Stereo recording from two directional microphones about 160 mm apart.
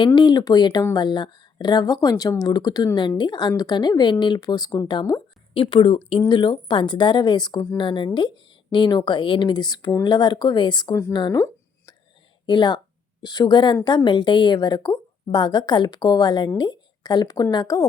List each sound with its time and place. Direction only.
0.0 s a woman's voice: 30° left (ahead or behind)
5.5 s a woman's voice: 35° left (ahead or behind)
12.5 s a woman's voice: 30° left (ahead or behind)